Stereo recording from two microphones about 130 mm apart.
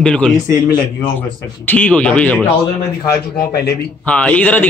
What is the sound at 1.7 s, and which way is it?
Speech, 10° left (ahead or behind).